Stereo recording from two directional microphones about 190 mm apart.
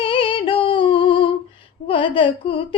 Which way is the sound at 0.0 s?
25° left (ahead or behind).